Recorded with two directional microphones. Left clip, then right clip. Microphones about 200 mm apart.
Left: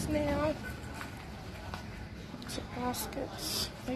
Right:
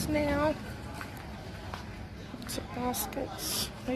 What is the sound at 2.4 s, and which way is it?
Speech, 10° right (ahead or behind).